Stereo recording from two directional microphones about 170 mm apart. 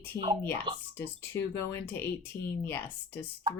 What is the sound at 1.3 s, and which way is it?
Speech, 15° left (ahead or behind).